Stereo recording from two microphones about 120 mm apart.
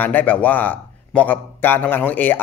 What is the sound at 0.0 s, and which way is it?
A man's voice, 15° left (ahead or behind).